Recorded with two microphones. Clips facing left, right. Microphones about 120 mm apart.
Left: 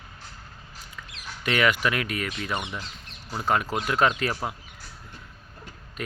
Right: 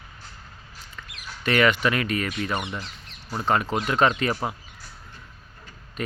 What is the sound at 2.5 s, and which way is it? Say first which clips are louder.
Speech: right 2 dB; 10° right (ahead or behind).